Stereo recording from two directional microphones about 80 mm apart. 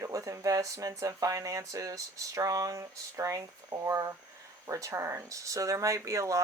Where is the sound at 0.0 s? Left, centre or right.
Right.